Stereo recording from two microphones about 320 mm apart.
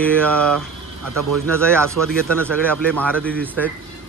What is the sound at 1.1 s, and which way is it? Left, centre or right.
Speech, right.